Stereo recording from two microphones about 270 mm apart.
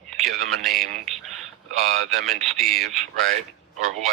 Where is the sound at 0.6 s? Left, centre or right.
Centre.